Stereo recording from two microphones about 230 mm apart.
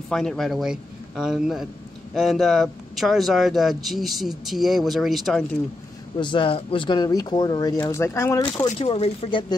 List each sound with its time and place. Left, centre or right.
0.1 s speech: centre
6.1 s speech: left
8.8 s speech: left